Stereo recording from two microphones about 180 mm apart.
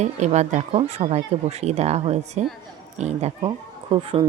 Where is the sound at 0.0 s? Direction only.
40° right (ahead or behind).